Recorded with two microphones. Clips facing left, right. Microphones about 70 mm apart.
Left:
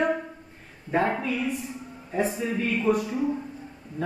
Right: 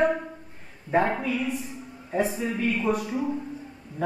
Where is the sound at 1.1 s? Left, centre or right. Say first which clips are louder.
Even; centre.